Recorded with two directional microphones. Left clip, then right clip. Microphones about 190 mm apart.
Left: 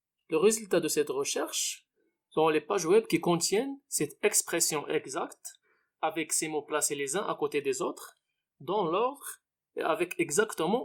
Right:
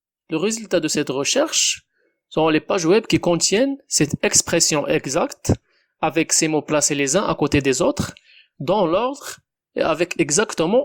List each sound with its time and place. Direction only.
0.3 s speech: 35° right (ahead or behind)